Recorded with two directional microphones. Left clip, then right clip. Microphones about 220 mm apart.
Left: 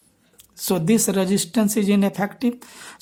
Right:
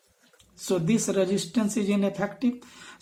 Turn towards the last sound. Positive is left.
turn(degrees=50)  # may be behind; listen again after turning